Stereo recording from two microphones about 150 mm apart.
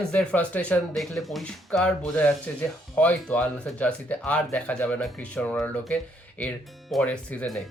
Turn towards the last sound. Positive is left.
turn(degrees=5)  # may be behind; listen again after turning